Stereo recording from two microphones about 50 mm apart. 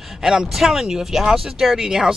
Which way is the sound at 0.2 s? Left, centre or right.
Centre.